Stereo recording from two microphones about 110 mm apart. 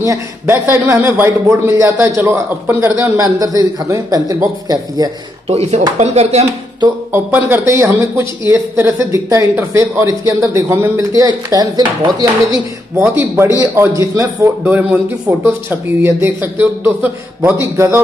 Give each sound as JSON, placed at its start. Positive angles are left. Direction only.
{"t": 0.0, "sound": "a man's voice", "side_deg": -25}
{"t": 5.5, "sound": "speech", "side_deg": -85}
{"t": 7.1, "sound": "a man's voice", "side_deg": -20}
{"t": 12.9, "sound": "a man's voice", "side_deg": -20}
{"t": 14.6, "sound": "a man's voice", "side_deg": -15}